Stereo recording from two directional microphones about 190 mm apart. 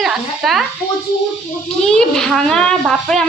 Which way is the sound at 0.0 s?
Centre (ahead or behind).